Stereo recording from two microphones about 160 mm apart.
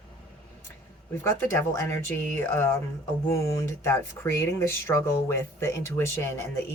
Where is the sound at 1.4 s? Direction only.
15° left (ahead or behind).